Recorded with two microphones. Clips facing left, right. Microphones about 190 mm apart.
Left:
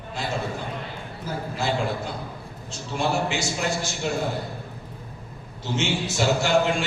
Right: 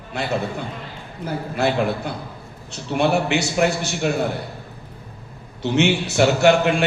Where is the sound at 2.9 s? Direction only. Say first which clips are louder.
Right 6 dB; 65° right (ahead or behind).